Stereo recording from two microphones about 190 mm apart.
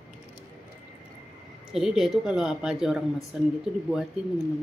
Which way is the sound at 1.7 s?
5° right (ahead or behind).